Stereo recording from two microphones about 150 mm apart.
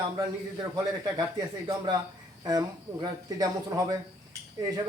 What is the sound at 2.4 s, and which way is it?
A man's voice, 25° right (ahead or behind).